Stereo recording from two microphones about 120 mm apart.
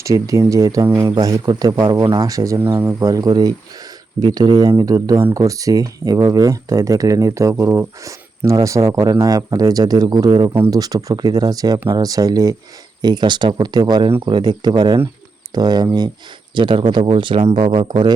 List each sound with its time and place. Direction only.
0.0 s speech: 25° right (ahead or behind)